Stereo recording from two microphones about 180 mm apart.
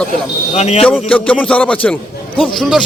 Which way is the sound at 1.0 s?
5° left (ahead or behind).